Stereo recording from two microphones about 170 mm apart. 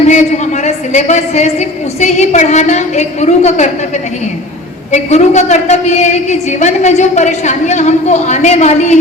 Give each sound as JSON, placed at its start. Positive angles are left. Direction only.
{"t": 0.0, "sound": "a woman's voice", "side_deg": 45}
{"t": 4.9, "sound": "a woman's voice", "side_deg": 40}